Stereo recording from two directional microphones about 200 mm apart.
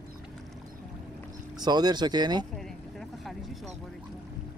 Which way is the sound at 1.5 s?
20° right (ahead or behind).